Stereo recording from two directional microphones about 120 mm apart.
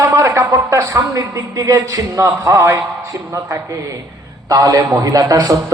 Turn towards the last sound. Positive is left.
turn(degrees=-30)  # may be behind; listen again after turning